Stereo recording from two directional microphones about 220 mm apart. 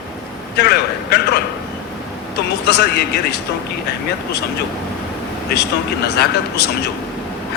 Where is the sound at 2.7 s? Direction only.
45° left (ahead or behind).